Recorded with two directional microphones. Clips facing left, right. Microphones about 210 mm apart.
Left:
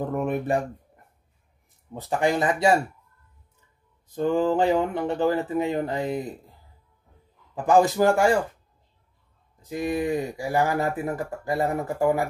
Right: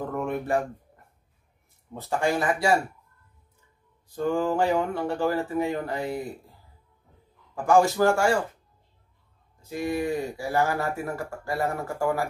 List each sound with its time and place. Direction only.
0.0 s speech: 20° left (ahead or behind)
2.0 s speech: 15° left (ahead or behind)
4.1 s speech: 20° left (ahead or behind)
7.5 s speech: 20° left (ahead or behind)
9.6 s speech: 15° left (ahead or behind)